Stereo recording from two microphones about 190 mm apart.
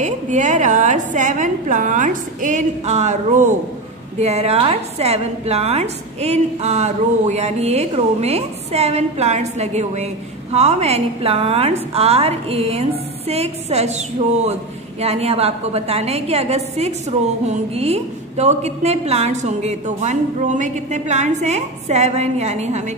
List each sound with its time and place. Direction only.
0.0 s a woman's voice: 40° right (ahead or behind)